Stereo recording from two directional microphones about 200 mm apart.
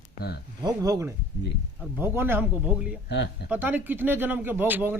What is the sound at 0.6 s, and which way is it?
Speech, 15° right (ahead or behind).